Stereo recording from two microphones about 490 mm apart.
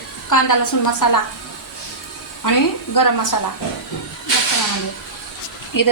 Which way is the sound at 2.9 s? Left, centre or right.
Left.